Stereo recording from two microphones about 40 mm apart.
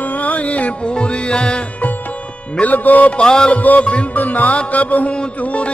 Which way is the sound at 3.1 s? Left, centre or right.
Left.